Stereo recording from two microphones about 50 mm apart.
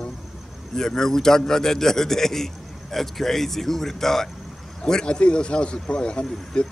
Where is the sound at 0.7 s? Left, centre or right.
Centre.